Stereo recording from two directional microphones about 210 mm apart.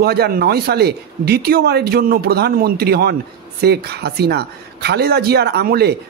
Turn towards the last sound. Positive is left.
turn(degrees=-50)  # may be behind; listen again after turning